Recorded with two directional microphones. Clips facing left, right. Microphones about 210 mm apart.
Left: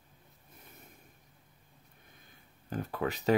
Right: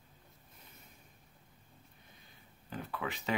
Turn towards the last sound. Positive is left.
turn(degrees=40)  # may be behind; listen again after turning